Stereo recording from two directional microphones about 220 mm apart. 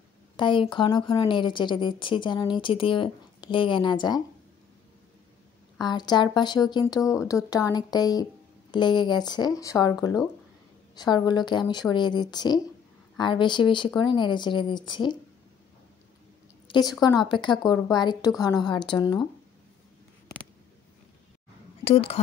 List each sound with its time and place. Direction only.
0.4 s a woman's voice: 20° left (ahead or behind)
5.8 s a woman's voice: 20° left (ahead or behind)
16.6 s a sound: 20° left (ahead or behind)
17.0 s a woman's voice: 20° left (ahead or behind)
21.8 s a woman's voice: 25° left (ahead or behind)